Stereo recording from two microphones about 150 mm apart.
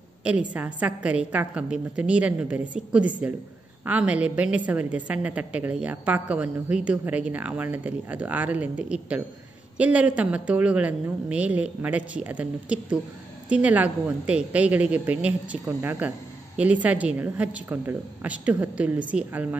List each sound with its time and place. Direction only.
0.2 s a woman's voice: 10° right (ahead or behind)